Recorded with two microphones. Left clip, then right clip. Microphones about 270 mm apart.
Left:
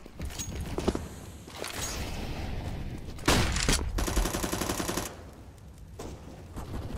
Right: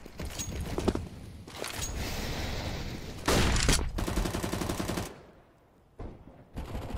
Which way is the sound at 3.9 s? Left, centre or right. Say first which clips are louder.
Left 2 dB; left.